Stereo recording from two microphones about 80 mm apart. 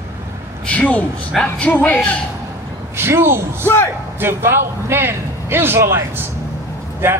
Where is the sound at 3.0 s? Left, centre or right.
Right.